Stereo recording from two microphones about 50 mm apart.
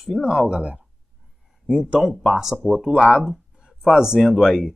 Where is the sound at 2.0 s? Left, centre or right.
Centre.